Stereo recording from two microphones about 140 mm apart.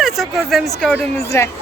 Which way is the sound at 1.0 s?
20° left (ahead or behind).